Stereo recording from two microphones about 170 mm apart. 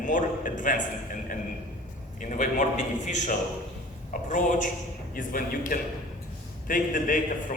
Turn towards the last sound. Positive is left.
turn(degrees=50)  # may be behind; listen again after turning